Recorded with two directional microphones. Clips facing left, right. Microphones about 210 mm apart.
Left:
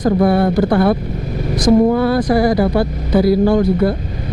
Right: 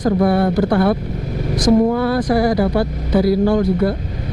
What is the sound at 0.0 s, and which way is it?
Speech, 25° left (ahead or behind).